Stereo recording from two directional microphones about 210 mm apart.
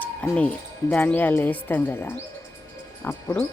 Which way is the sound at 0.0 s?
5° left (ahead or behind).